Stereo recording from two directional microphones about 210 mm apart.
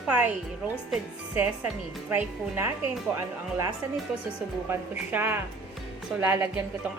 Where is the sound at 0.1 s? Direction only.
5° right (ahead or behind).